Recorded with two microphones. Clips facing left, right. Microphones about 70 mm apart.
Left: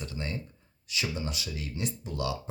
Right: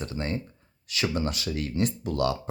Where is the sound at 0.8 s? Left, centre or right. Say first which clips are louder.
Right 6 dB; right.